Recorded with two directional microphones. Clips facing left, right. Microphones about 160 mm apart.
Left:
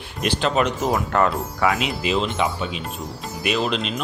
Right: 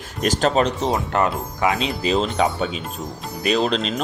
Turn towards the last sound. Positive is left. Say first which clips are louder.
# right 3 dB
turn(degrees=-35)  # may be behind; listen again after turning